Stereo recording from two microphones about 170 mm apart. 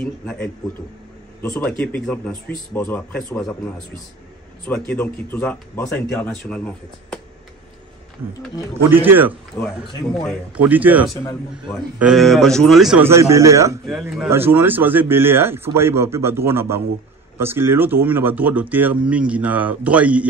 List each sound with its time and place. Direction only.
0.0 s a man's voice: 5° left (ahead or behind)
1.6 s speech: 10° left (ahead or behind)
8.9 s speech: 10° right (ahead or behind)
9.5 s speech: 15° left (ahead or behind)
10.2 s a man's voice: 10° right (ahead or behind)
13.0 s speech: 15° right (ahead or behind)
13.8 s a man's voice: centre (ahead or behind)
14.3 s speech: 10° right (ahead or behind)